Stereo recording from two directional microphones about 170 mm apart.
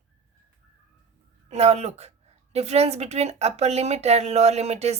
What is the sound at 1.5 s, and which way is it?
Speech, 40° right (ahead or behind).